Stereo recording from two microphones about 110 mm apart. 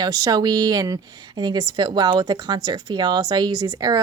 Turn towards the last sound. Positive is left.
turn(degrees=-35)  # may be behind; listen again after turning